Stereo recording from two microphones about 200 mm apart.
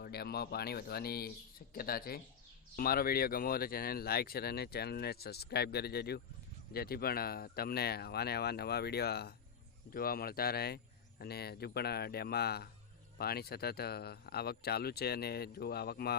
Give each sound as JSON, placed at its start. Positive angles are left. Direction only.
{"t": 0.0, "sound": "speech", "side_deg": 50}